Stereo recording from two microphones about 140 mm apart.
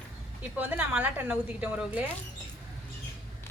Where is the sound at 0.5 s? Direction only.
10° right (ahead or behind).